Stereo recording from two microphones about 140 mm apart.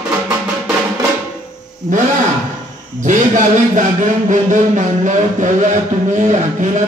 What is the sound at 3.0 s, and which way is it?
Speech, 65° right (ahead or behind).